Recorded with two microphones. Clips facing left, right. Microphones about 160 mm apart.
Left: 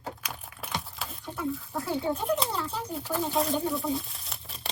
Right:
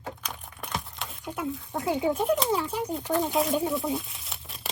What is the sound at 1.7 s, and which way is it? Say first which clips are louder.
Speech: right 6 dB; 15° right (ahead or behind).